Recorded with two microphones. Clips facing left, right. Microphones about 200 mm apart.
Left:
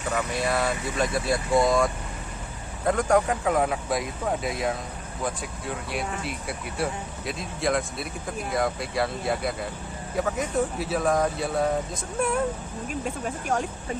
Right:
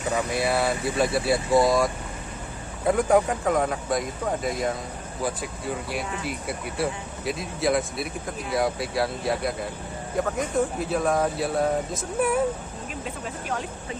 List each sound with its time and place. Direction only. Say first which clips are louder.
0.3 s speech: right 2 dB; 10° right (ahead or behind)
12.9 s speech: left 4 dB; 45° left (ahead or behind)